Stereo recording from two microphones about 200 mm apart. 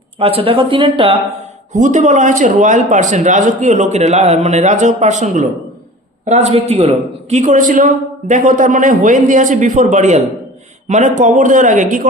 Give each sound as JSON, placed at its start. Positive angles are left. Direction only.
{"t": 0.2, "sound": "speech", "side_deg": -30}
{"t": 1.7, "sound": "a man's voice", "side_deg": -40}